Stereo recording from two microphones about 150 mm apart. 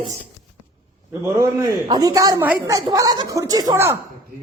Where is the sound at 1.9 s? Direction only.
25° right (ahead or behind).